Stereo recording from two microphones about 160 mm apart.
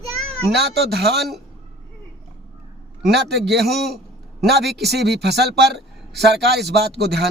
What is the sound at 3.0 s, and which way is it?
Speech, 90° right.